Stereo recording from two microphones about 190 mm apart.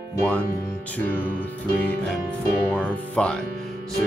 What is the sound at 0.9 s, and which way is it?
Music, 10° left (ahead or behind).